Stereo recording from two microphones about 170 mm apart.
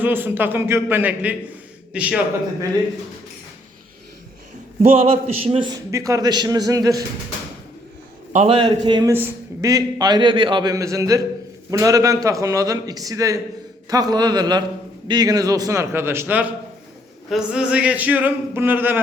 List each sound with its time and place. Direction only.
0.0 s a man's voice: 10° right (ahead or behind)
5.0 s a man's voice: 35° right (ahead or behind)
5.9 s a man's voice: 20° right (ahead or behind)
8.3 s a man's voice: 35° right (ahead or behind); by 18.9 s 10° right (ahead or behind)